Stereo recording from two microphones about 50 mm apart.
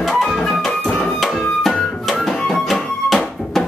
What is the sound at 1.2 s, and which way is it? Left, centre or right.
Music, centre.